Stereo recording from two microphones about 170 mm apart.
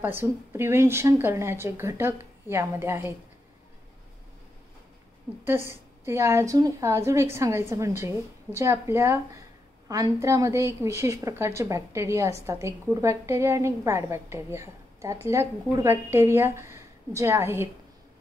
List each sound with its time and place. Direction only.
0.0 s a woman's voice: 15° right (ahead or behind)
5.4 s a woman's voice: 15° right (ahead or behind)